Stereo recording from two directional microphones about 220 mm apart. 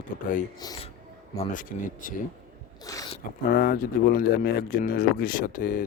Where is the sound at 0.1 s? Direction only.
40° left (ahead or behind).